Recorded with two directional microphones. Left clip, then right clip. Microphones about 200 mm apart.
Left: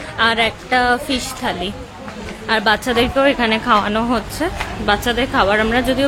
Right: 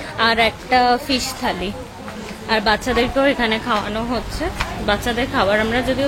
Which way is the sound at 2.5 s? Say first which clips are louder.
Left 2 dB; 10° left (ahead or behind).